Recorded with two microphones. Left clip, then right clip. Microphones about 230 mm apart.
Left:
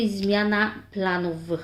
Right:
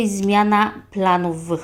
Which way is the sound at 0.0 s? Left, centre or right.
Right.